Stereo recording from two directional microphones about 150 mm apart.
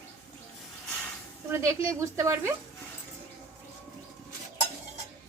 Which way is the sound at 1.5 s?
20° right (ahead or behind).